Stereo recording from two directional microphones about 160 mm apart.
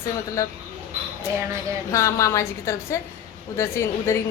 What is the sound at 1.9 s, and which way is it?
A woman's voice, 20° left (ahead or behind).